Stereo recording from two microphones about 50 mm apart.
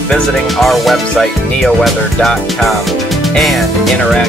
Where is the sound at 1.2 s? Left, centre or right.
Centre.